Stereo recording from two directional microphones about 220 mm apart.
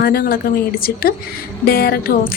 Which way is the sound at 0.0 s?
45° left (ahead or behind).